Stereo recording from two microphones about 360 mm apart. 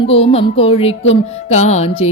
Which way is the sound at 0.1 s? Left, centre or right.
Centre.